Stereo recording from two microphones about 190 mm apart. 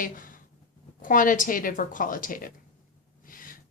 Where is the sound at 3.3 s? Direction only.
45° left (ahead or behind).